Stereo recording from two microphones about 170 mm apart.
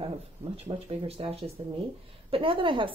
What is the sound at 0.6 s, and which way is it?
Speech, 35° right (ahead or behind).